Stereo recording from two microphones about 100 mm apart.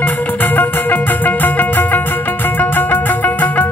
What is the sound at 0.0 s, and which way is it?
Music, 20° left (ahead or behind).